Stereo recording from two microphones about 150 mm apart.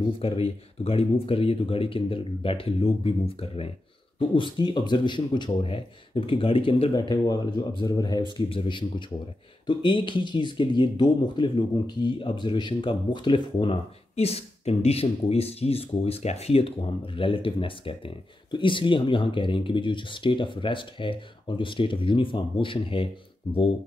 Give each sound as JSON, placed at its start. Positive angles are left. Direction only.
{"t": 0.2, "sound": "speech", "side_deg": 40}